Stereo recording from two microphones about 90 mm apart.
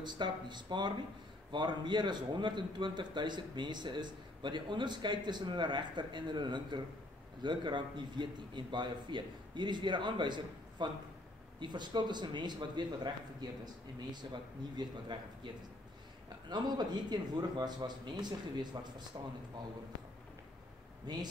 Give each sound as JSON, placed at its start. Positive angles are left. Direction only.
{"t": 0.0, "sound": "a man's voice", "side_deg": -55}
{"t": 21.1, "sound": "speech", "side_deg": -55}